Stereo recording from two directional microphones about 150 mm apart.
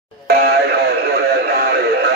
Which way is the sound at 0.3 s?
90° right.